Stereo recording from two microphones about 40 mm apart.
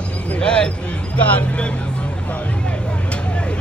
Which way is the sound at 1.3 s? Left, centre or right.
Left.